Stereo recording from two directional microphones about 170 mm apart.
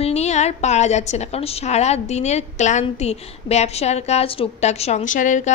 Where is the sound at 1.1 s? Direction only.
40° left (ahead or behind).